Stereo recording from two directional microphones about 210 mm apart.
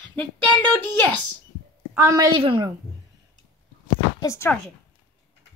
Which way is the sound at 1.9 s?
15° right (ahead or behind).